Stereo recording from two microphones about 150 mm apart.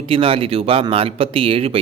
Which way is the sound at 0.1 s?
40° right (ahead or behind).